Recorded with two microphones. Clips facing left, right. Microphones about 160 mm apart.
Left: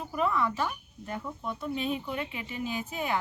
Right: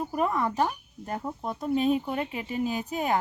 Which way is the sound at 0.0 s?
45° right (ahead or behind).